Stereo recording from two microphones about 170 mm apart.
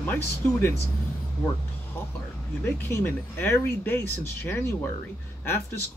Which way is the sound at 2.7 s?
15° left (ahead or behind).